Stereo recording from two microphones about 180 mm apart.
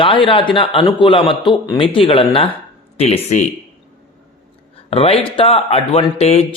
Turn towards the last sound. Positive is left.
turn(degrees=35)  # may be behind; listen again after turning